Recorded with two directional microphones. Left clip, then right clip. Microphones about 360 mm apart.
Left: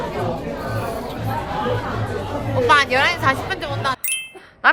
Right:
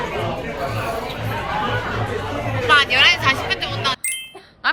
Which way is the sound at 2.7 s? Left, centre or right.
Left.